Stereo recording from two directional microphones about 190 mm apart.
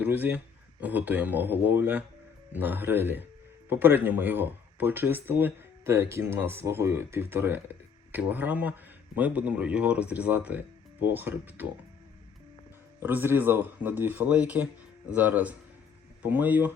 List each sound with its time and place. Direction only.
0.0 s speech: 10° right (ahead or behind)
13.0 s speech: 10° right (ahead or behind)